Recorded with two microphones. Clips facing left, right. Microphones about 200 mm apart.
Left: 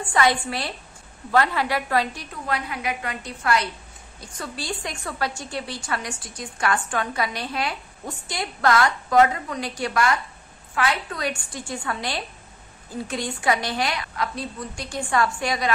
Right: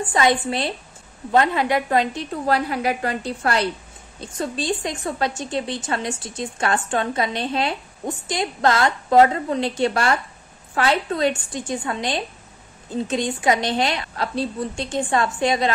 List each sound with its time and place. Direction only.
0.1 s speech: 20° right (ahead or behind)
2.4 s a woman's voice: 35° right (ahead or behind)